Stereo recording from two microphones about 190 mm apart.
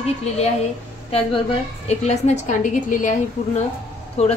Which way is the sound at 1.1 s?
30° left (ahead or behind).